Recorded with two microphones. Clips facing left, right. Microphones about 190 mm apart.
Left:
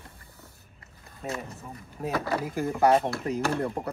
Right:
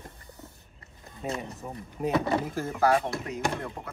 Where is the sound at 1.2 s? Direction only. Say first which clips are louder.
Right 1 dB; centre (ahead or behind).